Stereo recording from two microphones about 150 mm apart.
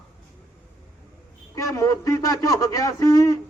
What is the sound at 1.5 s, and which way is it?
Speech, 20° left (ahead or behind).